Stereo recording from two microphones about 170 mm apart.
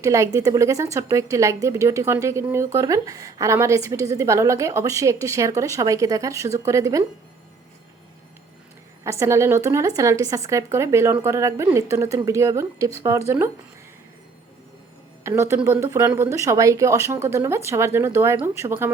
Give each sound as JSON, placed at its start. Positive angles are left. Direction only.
{"t": 0.0, "sound": "a woman's voice", "side_deg": -20}
{"t": 9.0, "sound": "a woman's voice", "side_deg": -15}
{"t": 15.2, "sound": "a woman's voice", "side_deg": -15}